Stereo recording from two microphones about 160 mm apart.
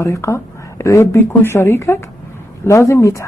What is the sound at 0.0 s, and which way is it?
Speech, 20° left (ahead or behind).